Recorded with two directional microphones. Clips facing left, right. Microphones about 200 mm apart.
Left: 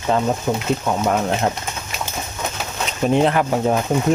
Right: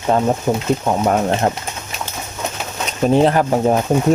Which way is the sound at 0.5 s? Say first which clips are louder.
Right 3 dB; 45° right (ahead or behind).